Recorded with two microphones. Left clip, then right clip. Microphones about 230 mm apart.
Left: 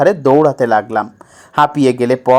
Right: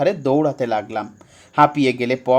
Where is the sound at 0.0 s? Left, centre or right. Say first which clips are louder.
Left 8 dB; left.